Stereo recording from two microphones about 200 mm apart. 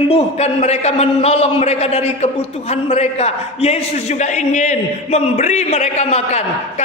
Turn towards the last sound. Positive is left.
turn(degrees=35)  # may be behind; listen again after turning